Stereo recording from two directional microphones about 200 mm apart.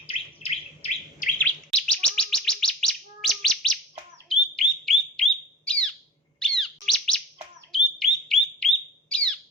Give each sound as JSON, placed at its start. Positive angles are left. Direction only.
{"t": 0.1, "sound": "bird", "side_deg": 30}
{"t": 1.4, "sound": "bird", "side_deg": 5}
{"t": 6.4, "sound": "chirp", "side_deg": 0}
{"t": 7.7, "sound": "bird", "side_deg": 0}